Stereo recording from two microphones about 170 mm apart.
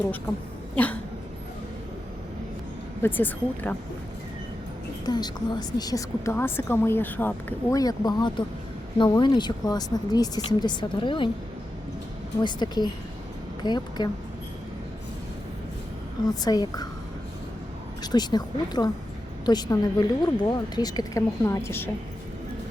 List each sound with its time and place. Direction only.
3.0 s speech: 10° left (ahead or behind)
5.0 s a woman's voice: 25° left (ahead or behind)
12.4 s a woman's voice: 25° left (ahead or behind)
16.3 s a woman's voice: 20° left (ahead or behind)
18.0 s a woman's voice: 25° left (ahead or behind)